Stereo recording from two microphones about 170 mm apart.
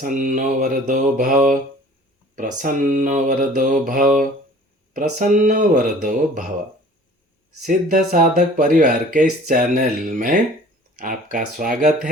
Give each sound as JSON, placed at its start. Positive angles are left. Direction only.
{"t": 0.0, "sound": "speech", "side_deg": -50}
{"t": 7.6, "sound": "speech", "side_deg": -50}